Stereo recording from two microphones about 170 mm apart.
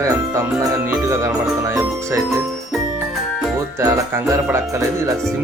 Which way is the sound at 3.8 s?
15° right (ahead or behind).